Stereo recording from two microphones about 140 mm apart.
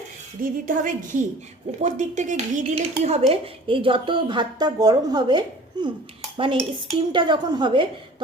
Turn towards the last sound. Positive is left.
turn(degrees=-35)  # may be behind; listen again after turning